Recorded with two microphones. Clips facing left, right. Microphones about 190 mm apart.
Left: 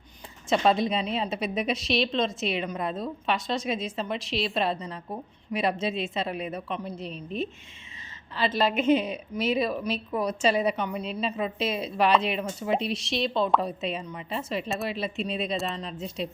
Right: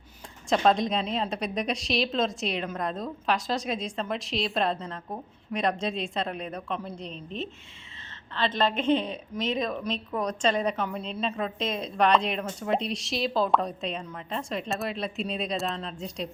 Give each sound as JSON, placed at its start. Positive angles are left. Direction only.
{"t": 0.5, "sound": "a woman's voice", "side_deg": 5}